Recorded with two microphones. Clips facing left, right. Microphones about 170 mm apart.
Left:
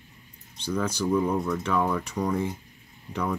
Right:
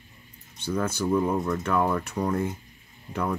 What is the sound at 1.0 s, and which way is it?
Speech, 5° right (ahead or behind).